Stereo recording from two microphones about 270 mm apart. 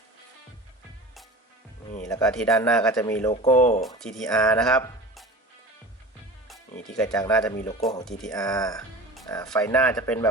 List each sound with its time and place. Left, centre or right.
2.0 s speech: centre
3.5 s speech: left
3.8 s speech: centre
4.3 s speech: centre
6.5 s music: centre
7.0 s speech: centre
8.3 s speech: centre